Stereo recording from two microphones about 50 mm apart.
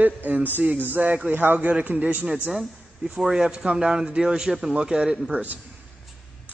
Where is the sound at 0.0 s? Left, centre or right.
Right.